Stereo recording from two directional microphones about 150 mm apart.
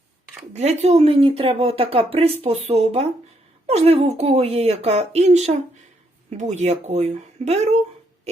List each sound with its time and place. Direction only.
0.5 s speech: 45° right (ahead or behind)